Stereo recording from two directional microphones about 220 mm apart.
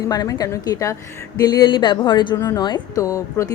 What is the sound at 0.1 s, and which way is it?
A woman's voice, 15° left (ahead or behind).